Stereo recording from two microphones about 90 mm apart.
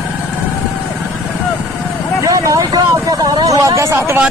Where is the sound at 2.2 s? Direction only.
35° right (ahead or behind).